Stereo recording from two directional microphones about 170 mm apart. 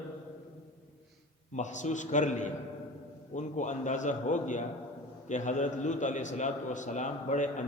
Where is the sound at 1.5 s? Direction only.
45° left (ahead or behind).